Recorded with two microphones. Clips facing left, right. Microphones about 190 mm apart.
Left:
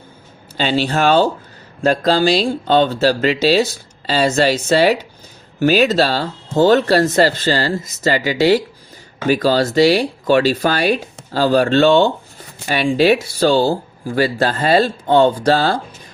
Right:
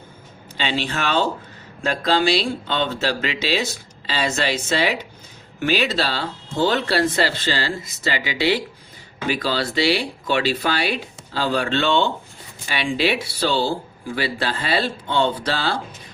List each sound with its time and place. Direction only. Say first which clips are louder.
0.5 s speech: left 7 dB; 40° left (ahead or behind)